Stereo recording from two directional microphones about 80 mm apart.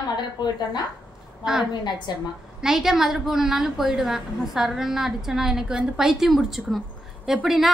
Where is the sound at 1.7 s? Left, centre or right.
Left.